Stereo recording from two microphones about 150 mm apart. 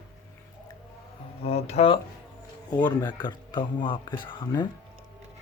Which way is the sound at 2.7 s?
30° left (ahead or behind).